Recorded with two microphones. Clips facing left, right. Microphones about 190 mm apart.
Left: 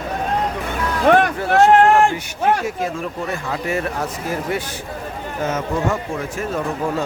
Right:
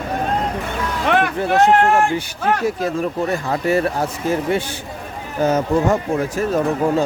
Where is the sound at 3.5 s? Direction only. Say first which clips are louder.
Right 5 dB; 35° right (ahead or behind).